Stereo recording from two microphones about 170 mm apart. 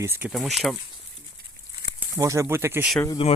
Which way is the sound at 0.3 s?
Centre (ahead or behind).